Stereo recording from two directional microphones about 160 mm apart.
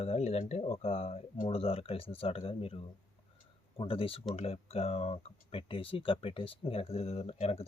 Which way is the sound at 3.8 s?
35° left (ahead or behind).